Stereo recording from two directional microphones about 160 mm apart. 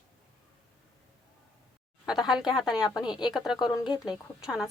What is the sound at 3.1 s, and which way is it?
Speech, 25° left (ahead or behind).